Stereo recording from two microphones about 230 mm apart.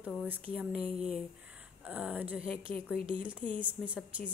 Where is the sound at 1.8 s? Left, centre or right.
Centre.